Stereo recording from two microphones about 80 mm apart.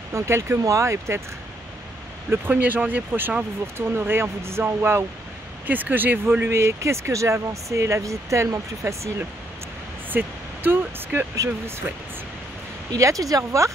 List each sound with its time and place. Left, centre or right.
0.1 s speech: right
2.4 s speech: right
10.0 s a sound: right
11.3 s speech: right
12.9 s speech: right